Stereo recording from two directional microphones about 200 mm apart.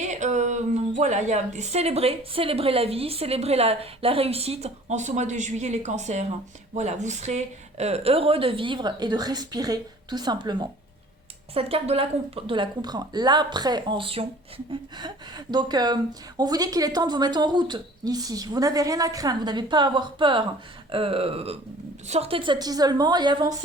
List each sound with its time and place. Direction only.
0.1 s a woman's voice: 35° right (ahead or behind)